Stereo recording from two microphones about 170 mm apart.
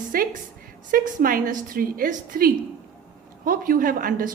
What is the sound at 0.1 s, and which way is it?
A woman's voice, 60° right (ahead or behind).